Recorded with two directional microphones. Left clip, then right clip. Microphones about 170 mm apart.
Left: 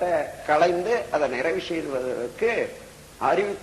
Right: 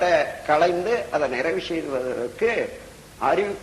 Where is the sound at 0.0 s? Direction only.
35° right (ahead or behind).